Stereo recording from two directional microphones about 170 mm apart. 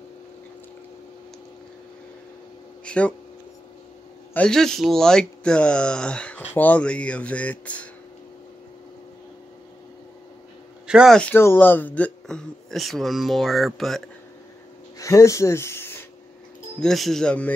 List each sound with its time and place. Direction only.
2.8 s speech: 5° left (ahead or behind)
4.3 s speech: 5° left (ahead or behind)
10.9 s speech: 5° right (ahead or behind)
11.1 s speech: 10° left (ahead or behind)
15.0 s speech: 20° left (ahead or behind)
16.8 s speech: centre (ahead or behind)